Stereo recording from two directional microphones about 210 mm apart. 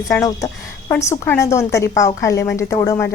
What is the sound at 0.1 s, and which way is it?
A woman's voice, 15° left (ahead or behind).